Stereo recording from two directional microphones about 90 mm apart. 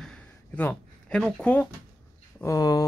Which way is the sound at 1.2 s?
15° left (ahead or behind).